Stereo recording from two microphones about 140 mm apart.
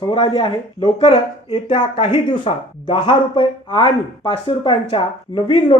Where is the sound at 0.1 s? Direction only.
40° left (ahead or behind).